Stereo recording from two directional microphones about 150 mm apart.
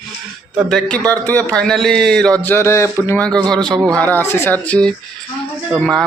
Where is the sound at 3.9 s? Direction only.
10° left (ahead or behind).